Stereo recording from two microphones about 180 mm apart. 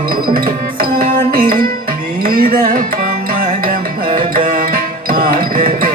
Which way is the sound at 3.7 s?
50° right (ahead or behind).